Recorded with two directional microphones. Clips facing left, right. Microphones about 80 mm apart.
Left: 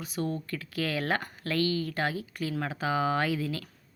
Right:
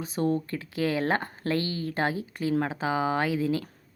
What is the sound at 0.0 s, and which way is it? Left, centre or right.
Speech, right.